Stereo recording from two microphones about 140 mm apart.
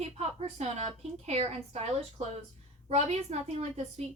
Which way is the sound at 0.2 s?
50° right (ahead or behind).